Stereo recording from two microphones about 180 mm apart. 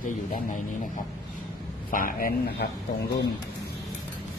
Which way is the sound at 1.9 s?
50° left (ahead or behind).